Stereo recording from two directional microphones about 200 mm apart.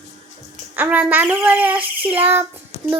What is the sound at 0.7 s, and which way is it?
A child's voice, 10° right (ahead or behind).